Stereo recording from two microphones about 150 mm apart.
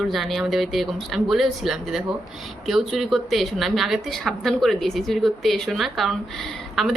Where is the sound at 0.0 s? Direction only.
Centre (ahead or behind).